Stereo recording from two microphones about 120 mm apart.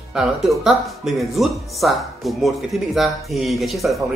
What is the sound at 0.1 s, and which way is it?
Speech, centre (ahead or behind).